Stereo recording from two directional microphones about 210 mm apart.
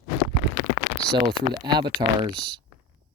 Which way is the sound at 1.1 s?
20° right (ahead or behind).